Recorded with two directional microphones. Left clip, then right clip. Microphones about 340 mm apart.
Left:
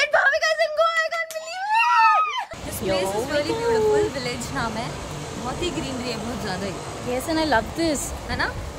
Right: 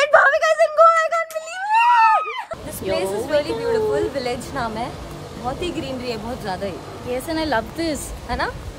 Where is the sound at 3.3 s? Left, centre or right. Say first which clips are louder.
Right 3 dB; centre.